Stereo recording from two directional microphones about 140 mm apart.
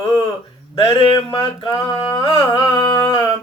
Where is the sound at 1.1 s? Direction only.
25° left (ahead or behind).